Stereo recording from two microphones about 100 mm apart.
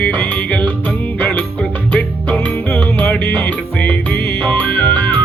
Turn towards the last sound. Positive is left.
turn(degrees=15)  # may be behind; listen again after turning